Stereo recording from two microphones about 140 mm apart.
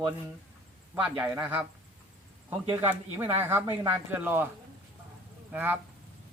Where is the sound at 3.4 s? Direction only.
15° right (ahead or behind).